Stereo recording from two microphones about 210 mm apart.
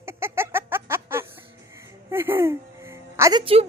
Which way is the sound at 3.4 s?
25° right (ahead or behind).